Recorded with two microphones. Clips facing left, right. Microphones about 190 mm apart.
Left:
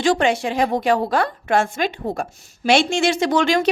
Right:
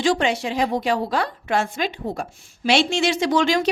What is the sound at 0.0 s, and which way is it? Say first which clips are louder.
Speech: left 2 dB; 50° left (ahead or behind).